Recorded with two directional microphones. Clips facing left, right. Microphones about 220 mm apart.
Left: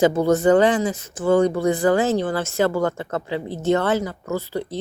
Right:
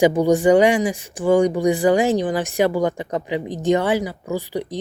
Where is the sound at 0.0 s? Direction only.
15° right (ahead or behind).